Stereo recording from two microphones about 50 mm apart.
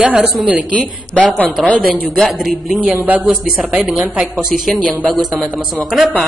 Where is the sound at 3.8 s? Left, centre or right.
Centre.